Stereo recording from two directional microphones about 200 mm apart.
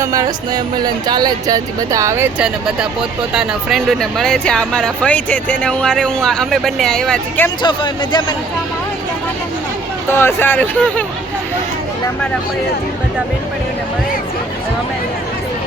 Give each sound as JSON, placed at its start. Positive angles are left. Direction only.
{"t": 0.0, "sound": "speech", "side_deg": -15}
{"t": 7.6, "sound": "speech", "side_deg": 25}
{"t": 10.1, "sound": "speech", "side_deg": 10}